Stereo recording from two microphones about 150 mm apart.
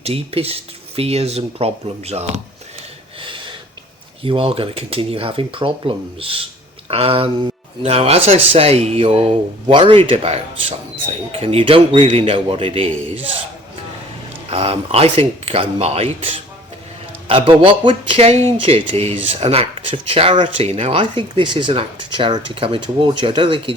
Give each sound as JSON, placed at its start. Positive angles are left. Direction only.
{"t": 0.0, "sound": "speech", "side_deg": -40}
{"t": 3.2, "sound": "a sound", "side_deg": -35}
{"t": 4.2, "sound": "speech", "side_deg": -35}
{"t": 14.5, "sound": "speech", "side_deg": -40}